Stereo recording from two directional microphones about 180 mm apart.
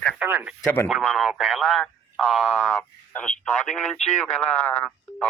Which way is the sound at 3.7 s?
40° left (ahead or behind).